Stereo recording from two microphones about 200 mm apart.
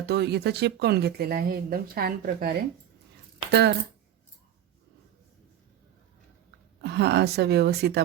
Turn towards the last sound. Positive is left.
turn(degrees=-55)  # may be behind; listen again after turning